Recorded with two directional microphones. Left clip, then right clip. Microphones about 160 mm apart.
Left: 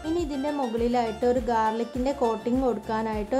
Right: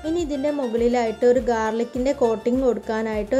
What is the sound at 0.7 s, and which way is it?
Speech, 15° right (ahead or behind).